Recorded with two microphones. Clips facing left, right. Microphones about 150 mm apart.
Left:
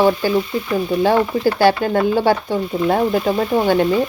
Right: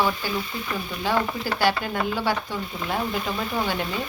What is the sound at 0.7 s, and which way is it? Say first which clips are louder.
Speech: left 10 dB; 40° left (ahead or behind).